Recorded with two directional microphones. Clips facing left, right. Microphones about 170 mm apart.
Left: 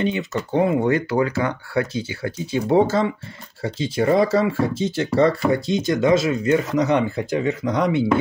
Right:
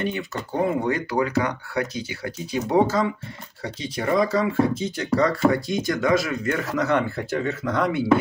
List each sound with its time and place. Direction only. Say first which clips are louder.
0.1 s speech: left 6 dB; 25° left (ahead or behind)